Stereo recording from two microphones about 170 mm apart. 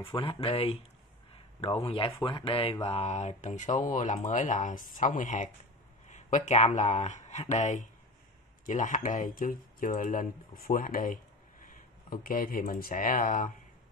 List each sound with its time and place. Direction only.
0.0 s speech: 30° left (ahead or behind); by 13.5 s 55° left (ahead or behind)